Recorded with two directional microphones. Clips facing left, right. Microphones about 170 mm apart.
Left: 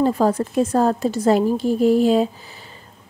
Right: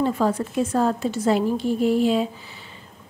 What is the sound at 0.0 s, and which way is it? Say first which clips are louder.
Speech: left 4 dB; 40° left (ahead or behind).